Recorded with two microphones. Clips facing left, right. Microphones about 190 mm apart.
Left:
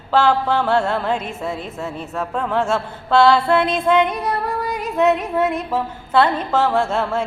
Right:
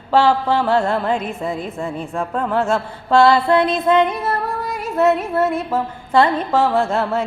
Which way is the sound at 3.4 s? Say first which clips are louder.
Right 2 dB; 10° left (ahead or behind).